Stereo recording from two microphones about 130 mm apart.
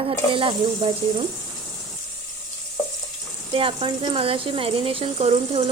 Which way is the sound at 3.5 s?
45° right (ahead or behind).